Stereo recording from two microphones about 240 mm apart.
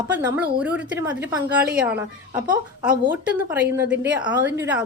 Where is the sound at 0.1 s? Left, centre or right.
Centre.